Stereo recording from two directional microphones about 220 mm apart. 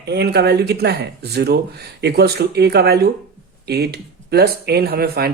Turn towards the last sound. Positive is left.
turn(degrees=-45)  # may be behind; listen again after turning